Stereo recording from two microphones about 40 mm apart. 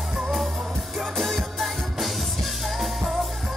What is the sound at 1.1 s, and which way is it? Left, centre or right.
Music, centre.